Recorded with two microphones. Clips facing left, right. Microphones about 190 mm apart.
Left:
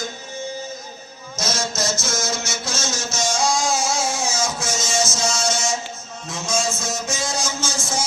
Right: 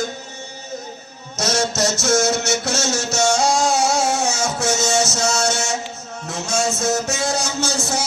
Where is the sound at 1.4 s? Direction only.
70° right (ahead or behind).